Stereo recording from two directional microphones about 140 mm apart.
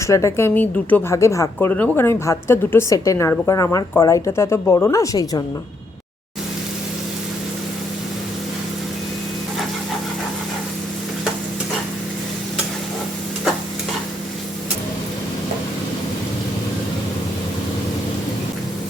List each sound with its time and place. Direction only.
0.1 s speech: 20° left (ahead or behind)